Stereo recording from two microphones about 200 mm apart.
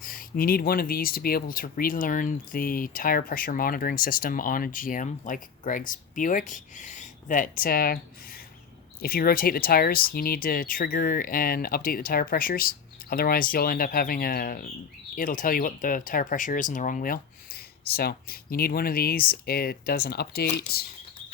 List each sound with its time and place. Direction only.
0.0 s speech: 45° left (ahead or behind)